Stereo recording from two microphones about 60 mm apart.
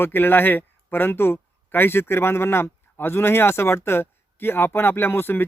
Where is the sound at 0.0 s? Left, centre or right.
Left.